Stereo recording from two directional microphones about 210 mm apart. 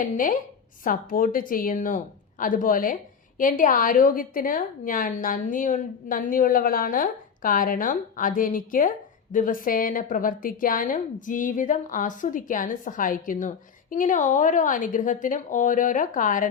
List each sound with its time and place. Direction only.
0.0 s a woman's voice: 40° left (ahead or behind)